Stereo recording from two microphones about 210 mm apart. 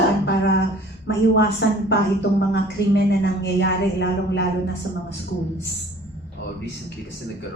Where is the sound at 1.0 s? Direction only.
55° left (ahead or behind).